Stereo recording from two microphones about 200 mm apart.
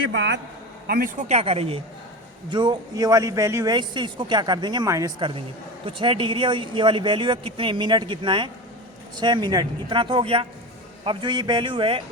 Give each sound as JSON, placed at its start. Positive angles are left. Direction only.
{"t": 0.1, "sound": "a man's voice", "side_deg": -65}
{"t": 0.9, "sound": "a man's voice", "side_deg": -50}
{"t": 1.3, "sound": "a man's voice", "side_deg": -30}